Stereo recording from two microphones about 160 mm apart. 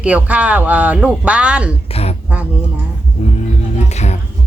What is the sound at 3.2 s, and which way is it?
Music, 45° left (ahead or behind).